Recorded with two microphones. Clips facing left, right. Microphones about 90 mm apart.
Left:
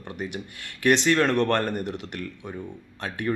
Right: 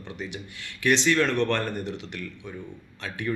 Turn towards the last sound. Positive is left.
turn(degrees=45)  # may be behind; listen again after turning